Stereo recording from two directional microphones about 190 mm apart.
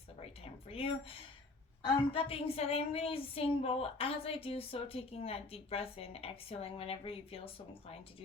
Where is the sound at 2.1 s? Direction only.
30° left (ahead or behind).